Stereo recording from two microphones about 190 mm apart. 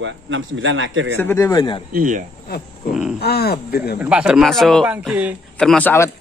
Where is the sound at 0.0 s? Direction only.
80° right.